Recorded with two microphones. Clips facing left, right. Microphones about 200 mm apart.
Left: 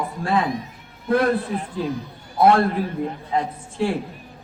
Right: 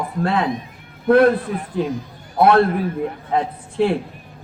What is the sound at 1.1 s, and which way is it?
A man's voice, 55° right (ahead or behind).